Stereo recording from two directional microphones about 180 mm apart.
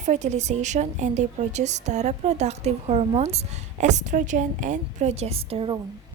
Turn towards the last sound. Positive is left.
turn(degrees=-30)  # may be behind; listen again after turning